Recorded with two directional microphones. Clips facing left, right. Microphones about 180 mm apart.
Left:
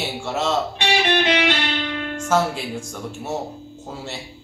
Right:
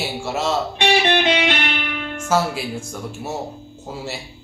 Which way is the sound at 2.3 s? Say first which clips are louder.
Even; 5° right (ahead or behind).